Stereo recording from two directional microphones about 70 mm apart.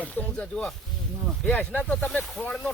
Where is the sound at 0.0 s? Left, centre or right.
Left.